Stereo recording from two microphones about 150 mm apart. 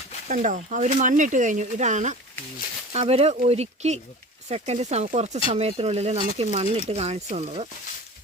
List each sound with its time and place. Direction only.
0.3 s speech: 55° right (ahead or behind)